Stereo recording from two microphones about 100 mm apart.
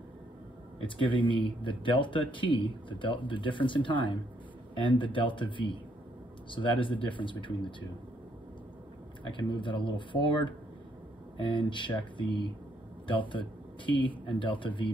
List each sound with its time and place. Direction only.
0.8 s speech: 55° left (ahead or behind)
9.2 s speech: 50° left (ahead or behind)